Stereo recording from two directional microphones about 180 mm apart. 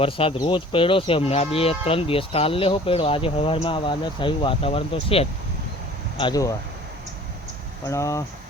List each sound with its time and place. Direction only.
0.0 s speech: 30° left (ahead or behind)
7.9 s speech: 15° left (ahead or behind)